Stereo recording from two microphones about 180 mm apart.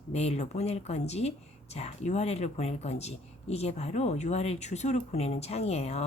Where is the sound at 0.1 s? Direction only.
35° left (ahead or behind).